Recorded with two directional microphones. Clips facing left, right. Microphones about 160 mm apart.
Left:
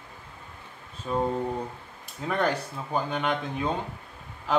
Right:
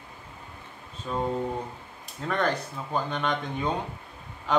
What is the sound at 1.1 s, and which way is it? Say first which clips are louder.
Speech: left 1 dB; 5° left (ahead or behind).